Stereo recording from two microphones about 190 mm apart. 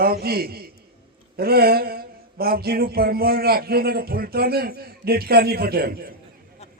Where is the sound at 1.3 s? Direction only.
55° right (ahead or behind).